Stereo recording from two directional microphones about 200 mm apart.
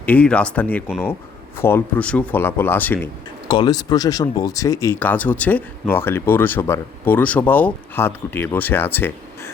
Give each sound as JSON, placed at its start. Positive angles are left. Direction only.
{"t": 0.0, "sound": "speech", "side_deg": 5}
{"t": 3.5, "sound": "speech", "side_deg": 20}